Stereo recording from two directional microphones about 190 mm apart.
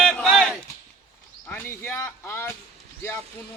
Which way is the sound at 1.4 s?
10° left (ahead or behind).